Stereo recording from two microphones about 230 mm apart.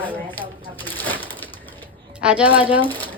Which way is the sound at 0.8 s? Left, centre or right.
Centre.